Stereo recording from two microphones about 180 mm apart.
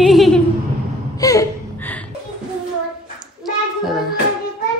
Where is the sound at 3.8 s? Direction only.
Centre (ahead or behind).